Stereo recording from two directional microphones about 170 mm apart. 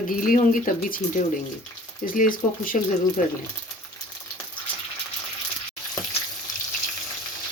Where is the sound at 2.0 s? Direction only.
55° left (ahead or behind).